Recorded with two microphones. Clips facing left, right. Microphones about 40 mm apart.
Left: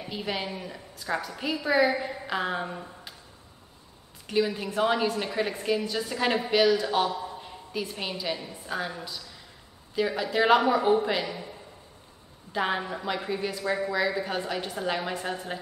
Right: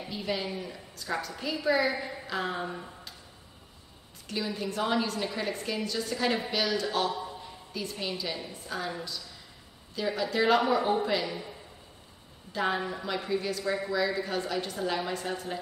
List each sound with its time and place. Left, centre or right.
0.1 s a woman's voice: left
4.3 s a woman's voice: left
9.9 s a woman's voice: centre
12.5 s a woman's voice: centre